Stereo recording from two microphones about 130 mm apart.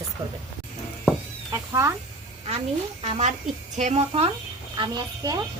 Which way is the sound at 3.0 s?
60° right (ahead or behind).